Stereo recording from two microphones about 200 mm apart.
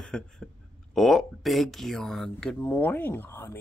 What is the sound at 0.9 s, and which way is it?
Speech, centre (ahead or behind).